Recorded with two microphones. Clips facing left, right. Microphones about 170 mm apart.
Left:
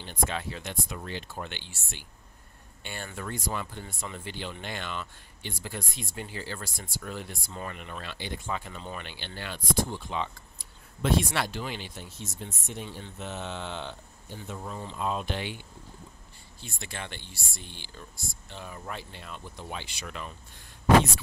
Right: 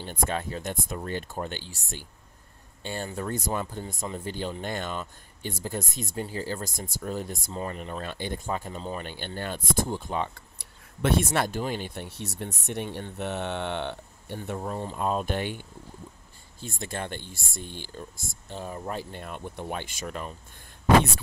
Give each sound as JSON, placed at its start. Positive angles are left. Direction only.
{"t": 0.0, "sound": "speech", "side_deg": -45}
{"t": 7.4, "sound": "speech", "side_deg": -30}
{"t": 11.3, "sound": "speech", "side_deg": -45}
{"t": 16.6, "sound": "speech", "side_deg": -45}